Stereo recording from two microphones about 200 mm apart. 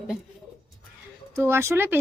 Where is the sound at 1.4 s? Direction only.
10° right (ahead or behind).